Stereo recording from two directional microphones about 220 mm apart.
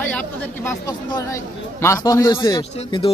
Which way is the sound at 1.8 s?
15° left (ahead or behind).